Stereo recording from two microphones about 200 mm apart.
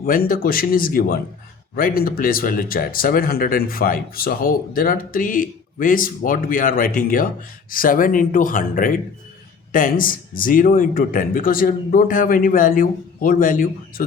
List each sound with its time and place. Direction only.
0.3 s speech: 45° left (ahead or behind)